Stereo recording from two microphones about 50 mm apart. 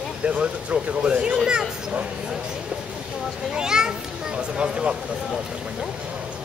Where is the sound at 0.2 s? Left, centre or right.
Right.